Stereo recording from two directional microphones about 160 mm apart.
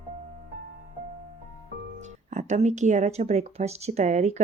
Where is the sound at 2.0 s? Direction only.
45° right (ahead or behind).